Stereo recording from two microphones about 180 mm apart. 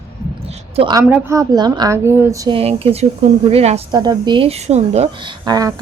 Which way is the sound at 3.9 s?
20° right (ahead or behind).